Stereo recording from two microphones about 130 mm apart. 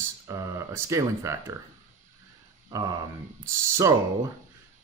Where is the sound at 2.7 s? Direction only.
30° right (ahead or behind).